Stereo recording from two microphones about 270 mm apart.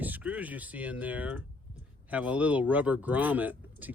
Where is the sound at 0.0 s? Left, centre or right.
Centre.